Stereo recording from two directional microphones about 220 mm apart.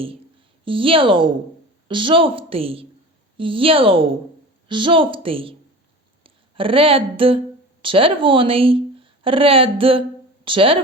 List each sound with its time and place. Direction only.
0.6 s speech: 25° right (ahead or behind)